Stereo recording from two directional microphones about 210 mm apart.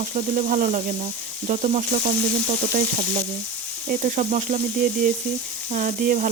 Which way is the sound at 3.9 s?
40° right (ahead or behind).